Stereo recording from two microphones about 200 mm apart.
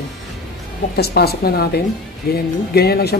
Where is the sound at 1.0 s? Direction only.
50° left (ahead or behind).